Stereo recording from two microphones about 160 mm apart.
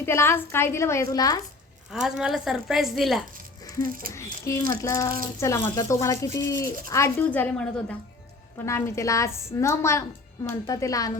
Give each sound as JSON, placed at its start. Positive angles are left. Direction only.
{"t": 0.0, "sound": "a woman's voice", "side_deg": 15}
{"t": 1.9, "sound": "a woman's voice", "side_deg": -5}
{"t": 3.8, "sound": "speech", "side_deg": -60}
{"t": 4.1, "sound": "a sound", "side_deg": 20}
{"t": 4.8, "sound": "a woman's voice", "side_deg": 20}